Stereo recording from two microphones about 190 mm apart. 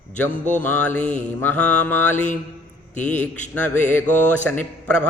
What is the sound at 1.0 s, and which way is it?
Mantra, 40° left (ahead or behind).